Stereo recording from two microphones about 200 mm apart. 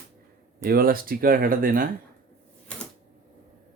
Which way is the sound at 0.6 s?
45° right (ahead or behind).